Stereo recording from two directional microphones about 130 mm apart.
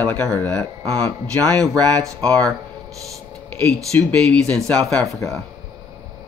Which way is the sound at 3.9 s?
10° left (ahead or behind).